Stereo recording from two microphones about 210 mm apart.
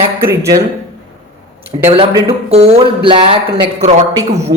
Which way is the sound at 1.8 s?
25° right (ahead or behind).